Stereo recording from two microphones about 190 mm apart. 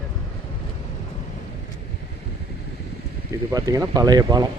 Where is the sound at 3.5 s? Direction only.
20° right (ahead or behind).